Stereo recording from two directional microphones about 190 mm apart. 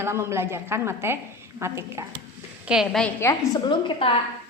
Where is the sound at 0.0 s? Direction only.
15° right (ahead or behind).